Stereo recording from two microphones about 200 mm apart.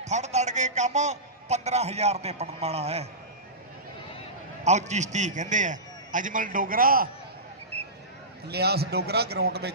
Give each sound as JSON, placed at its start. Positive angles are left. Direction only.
{"t": 0.0, "sound": "a man's voice", "side_deg": -35}
{"t": 4.6, "sound": "a man's voice", "side_deg": -35}
{"t": 8.5, "sound": "a man's voice", "side_deg": -55}